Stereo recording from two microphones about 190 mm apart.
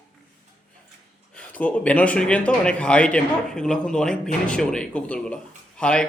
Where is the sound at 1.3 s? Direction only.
5° left (ahead or behind).